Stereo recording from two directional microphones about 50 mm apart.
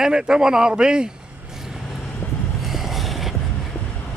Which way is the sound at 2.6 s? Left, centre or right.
Centre.